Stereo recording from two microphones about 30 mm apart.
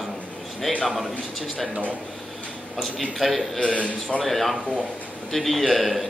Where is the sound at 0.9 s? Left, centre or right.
Centre.